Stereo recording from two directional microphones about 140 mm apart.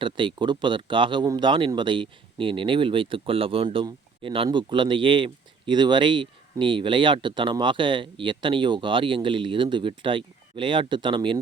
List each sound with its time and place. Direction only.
0.0 s speech: 35° right (ahead or behind)